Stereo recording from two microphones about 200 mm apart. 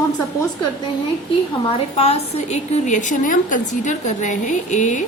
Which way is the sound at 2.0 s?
30° left (ahead or behind).